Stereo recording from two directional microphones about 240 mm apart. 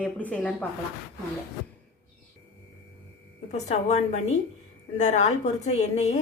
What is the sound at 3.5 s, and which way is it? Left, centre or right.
A woman's voice, left.